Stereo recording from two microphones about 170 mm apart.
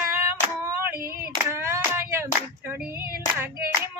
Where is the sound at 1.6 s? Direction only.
15° right (ahead or behind).